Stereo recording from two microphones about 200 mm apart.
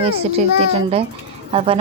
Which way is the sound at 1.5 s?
30° right (ahead or behind).